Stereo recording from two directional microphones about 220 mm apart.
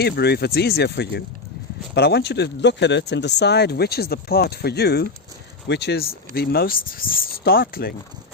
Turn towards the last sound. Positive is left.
turn(degrees=40)  # may be behind; listen again after turning